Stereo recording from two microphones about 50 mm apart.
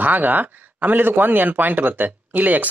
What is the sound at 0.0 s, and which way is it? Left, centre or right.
Speech, right.